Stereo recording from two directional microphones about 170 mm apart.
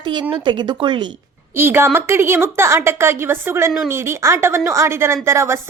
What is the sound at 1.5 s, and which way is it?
A woman's voice, 15° right (ahead or behind).